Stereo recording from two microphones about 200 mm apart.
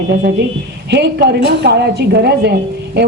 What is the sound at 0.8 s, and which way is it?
A woman's voice, 55° right (ahead or behind).